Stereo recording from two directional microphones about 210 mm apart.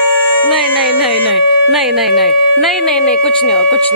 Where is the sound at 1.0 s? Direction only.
Centre (ahead or behind).